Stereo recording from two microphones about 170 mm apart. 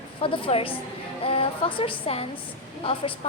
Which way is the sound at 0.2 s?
30° left (ahead or behind).